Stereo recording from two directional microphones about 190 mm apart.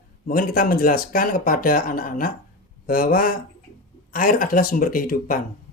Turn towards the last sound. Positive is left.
turn(degrees=45)  # may be behind; listen again after turning